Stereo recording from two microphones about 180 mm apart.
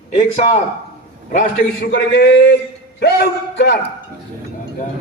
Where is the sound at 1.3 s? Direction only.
50° left (ahead or behind).